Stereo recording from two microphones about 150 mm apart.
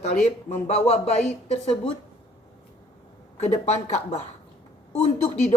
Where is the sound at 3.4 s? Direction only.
50° left (ahead or behind).